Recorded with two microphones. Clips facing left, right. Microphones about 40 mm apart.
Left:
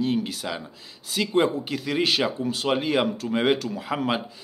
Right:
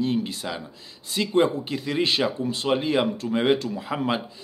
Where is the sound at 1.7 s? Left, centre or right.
Left.